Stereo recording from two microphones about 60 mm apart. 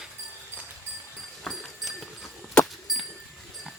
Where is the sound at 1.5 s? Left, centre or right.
Centre.